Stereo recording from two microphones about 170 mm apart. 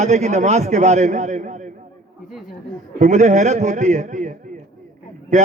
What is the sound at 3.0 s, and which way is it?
A man's voice, 45° right (ahead or behind).